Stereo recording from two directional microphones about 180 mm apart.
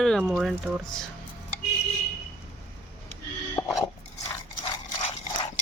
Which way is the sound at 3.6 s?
10° left (ahead or behind).